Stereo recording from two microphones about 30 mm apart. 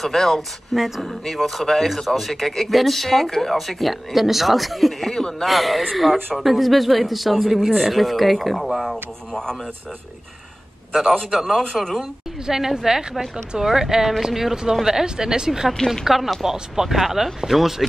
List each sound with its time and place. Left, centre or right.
0.0 s speech: centre
0.7 s speech: centre
11.3 s speech: centre; by 15.7 s right
16.1 s speech: centre
16.4 s speech: centre